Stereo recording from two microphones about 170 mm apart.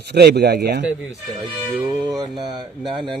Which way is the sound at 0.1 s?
75° right (ahead or behind).